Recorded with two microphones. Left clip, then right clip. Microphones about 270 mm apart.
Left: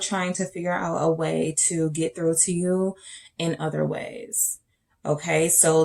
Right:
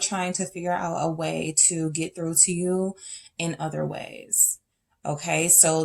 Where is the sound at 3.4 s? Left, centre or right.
Right.